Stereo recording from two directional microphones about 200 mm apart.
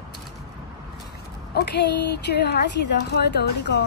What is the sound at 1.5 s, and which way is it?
A woman's voice, 55° left (ahead or behind).